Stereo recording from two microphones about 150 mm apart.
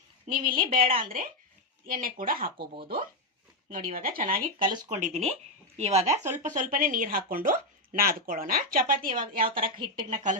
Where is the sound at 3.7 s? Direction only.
60° right (ahead or behind).